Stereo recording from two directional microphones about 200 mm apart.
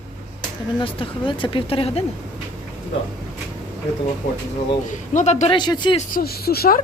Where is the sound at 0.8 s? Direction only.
25° left (ahead or behind).